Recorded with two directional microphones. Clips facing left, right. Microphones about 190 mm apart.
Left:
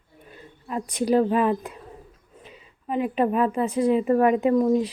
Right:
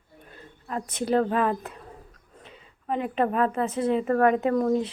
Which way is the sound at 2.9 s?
10° left (ahead or behind).